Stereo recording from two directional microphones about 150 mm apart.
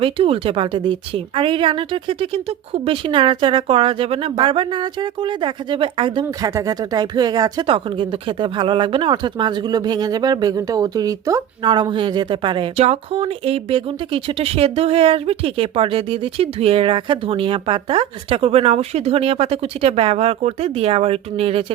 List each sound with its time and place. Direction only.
0.0 s speech: 40° right (ahead or behind)
6.2 s speech: 20° right (ahead or behind)
12.7 s speech: 45° right (ahead or behind)